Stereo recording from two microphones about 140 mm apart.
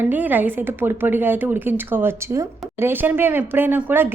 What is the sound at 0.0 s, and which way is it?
A woman's voice, 10° right (ahead or behind).